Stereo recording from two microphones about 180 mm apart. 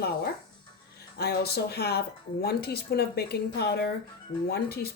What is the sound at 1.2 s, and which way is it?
Speech, 60° left (ahead or behind).